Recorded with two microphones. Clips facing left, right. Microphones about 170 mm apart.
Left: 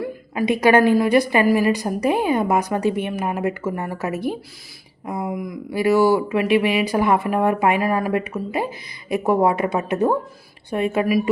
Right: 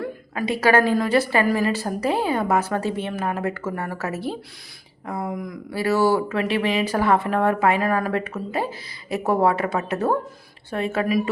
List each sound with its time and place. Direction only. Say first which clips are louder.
0.0 s a woman's voice: left 4 dB; 15° left (ahead or behind)